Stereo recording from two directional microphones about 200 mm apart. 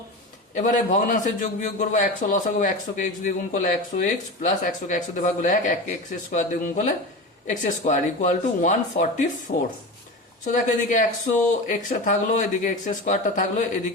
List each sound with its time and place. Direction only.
0.5 s a man's voice: 40° left (ahead or behind)
9.5 s speech: 50° left (ahead or behind)
10.4 s a man's voice: 40° left (ahead or behind)